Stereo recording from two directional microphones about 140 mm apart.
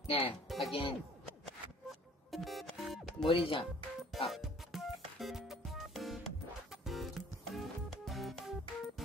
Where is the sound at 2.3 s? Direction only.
Centre (ahead or behind).